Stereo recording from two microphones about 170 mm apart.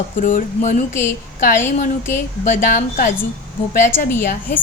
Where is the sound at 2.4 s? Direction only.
45° left (ahead or behind).